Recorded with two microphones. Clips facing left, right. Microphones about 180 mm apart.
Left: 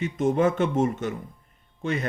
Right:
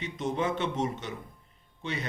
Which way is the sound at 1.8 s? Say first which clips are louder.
Left 7 dB; 50° left (ahead or behind).